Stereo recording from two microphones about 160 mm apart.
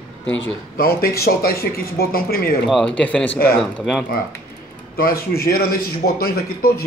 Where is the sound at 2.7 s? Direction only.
5° left (ahead or behind).